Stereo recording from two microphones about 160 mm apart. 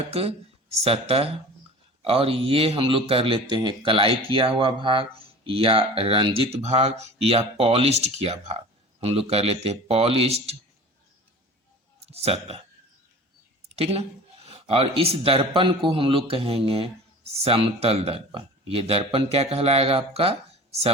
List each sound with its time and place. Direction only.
0.1 s speech: 40° right (ahead or behind)
11.9 s a sound: 40° right (ahead or behind)
13.7 s speech: 40° right (ahead or behind)